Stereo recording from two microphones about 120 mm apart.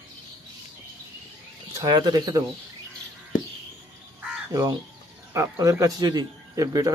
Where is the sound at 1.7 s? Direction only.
30° right (ahead or behind).